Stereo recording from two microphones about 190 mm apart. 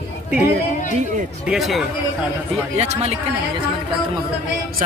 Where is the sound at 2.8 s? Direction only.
35° right (ahead or behind).